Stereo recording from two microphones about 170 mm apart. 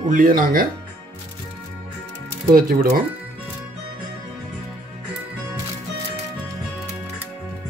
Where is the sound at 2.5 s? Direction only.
60° right (ahead or behind).